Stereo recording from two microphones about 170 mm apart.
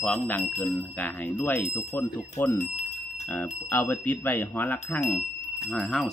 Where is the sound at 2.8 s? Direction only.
45° left (ahead or behind).